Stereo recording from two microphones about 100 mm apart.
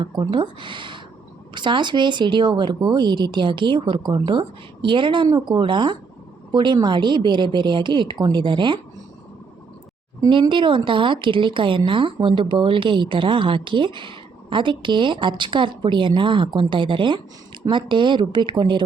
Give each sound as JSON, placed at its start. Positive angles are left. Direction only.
{"t": 0.0, "sound": "a woman's voice", "side_deg": -50}
{"t": 10.5, "sound": "speech", "side_deg": -55}